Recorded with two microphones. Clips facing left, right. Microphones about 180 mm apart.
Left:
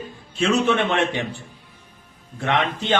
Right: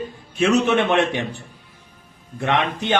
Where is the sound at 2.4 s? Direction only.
15° right (ahead or behind).